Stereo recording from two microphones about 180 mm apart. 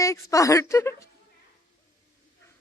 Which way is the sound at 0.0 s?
20° left (ahead or behind).